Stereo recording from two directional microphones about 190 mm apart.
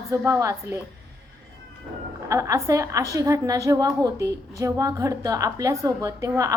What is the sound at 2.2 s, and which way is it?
A woman's voice, 15° right (ahead or behind).